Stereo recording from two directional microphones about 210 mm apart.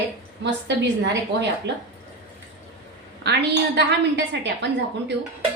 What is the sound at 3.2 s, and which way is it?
A woman's voice, 50° right (ahead or behind).